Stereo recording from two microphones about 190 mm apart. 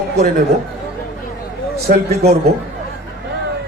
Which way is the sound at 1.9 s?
55° right (ahead or behind).